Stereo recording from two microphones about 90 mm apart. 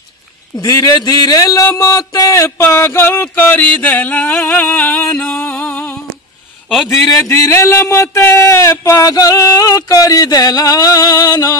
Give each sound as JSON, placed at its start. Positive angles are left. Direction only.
{"t": 0.7, "sound": "speech", "side_deg": 40}
{"t": 1.7, "sound": "a sound", "side_deg": 35}
{"t": 6.7, "sound": "a man's voice", "side_deg": 0}
{"t": 7.2, "sound": "speech", "side_deg": 35}